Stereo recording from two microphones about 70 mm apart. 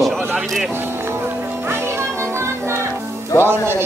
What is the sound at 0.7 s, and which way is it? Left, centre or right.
Music, right.